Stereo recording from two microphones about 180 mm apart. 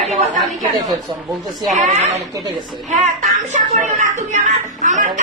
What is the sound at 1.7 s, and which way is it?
Speech, 40° right (ahead or behind).